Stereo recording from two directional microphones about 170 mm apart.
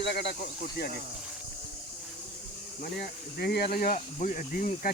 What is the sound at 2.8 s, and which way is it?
Speech, 70° left (ahead or behind).